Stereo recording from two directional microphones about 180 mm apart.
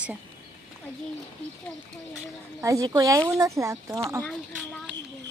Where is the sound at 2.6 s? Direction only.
20° right (ahead or behind).